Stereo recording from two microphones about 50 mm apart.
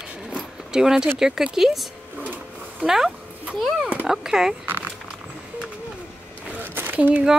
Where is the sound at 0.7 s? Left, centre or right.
Centre.